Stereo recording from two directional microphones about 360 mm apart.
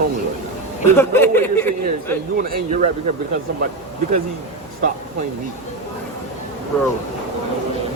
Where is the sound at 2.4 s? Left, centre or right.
Right.